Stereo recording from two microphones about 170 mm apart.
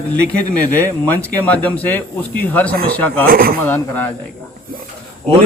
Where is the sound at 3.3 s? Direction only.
60° right (ahead or behind).